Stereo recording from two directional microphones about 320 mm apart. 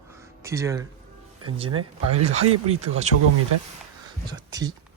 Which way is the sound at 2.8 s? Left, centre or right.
Right.